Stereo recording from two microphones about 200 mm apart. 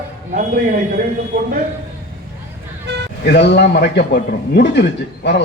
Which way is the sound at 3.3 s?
60° left (ahead or behind).